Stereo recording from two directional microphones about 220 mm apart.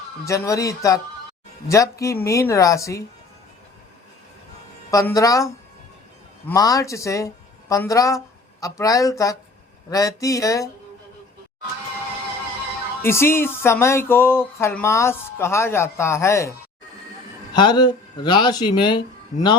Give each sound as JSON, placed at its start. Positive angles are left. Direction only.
{"t": 0.3, "sound": "music", "side_deg": 15}
{"t": 4.9, "sound": "music", "side_deg": 15}
{"t": 6.5, "sound": "music", "side_deg": 15}
{"t": 13.0, "sound": "music", "side_deg": 10}
{"t": 17.5, "sound": "speech", "side_deg": 20}